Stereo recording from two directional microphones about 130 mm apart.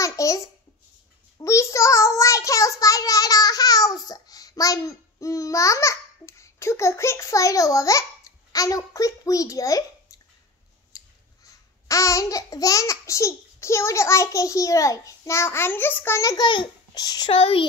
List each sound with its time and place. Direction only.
0.0 s a child's voice: 25° left (ahead or behind)
1.4 s child singing: 25° left (ahead or behind)
10.9 s scissors: 25° left (ahead or behind)
11.9 s a child's voice: 25° left (ahead or behind)
17.3 s a child's voice: 45° left (ahead or behind)